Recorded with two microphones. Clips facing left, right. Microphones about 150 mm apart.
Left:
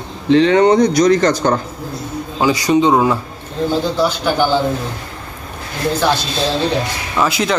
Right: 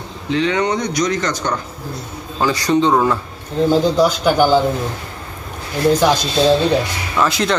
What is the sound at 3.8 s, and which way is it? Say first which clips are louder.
Speech: right 3 dB; 10° right (ahead or behind).